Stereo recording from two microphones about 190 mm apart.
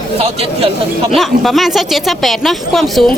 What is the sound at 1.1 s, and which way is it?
Speech, centre (ahead or behind).